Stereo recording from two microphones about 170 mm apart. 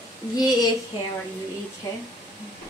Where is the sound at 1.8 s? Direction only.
15° left (ahead or behind).